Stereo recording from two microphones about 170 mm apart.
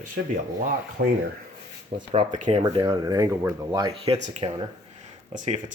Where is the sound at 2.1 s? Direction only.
35° right (ahead or behind).